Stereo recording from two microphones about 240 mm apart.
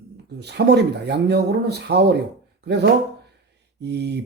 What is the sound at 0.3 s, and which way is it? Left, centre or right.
Speech, right.